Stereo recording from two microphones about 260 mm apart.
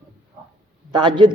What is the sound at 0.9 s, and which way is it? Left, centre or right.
Speech, centre.